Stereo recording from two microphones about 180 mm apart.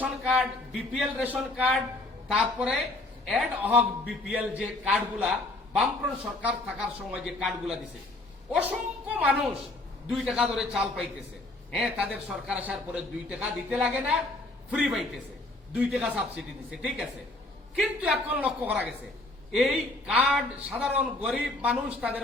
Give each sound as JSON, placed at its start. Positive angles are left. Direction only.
{"t": 0.0, "sound": "a man's voice", "side_deg": -5}
{"t": 17.7, "sound": "a man's voice", "side_deg": -5}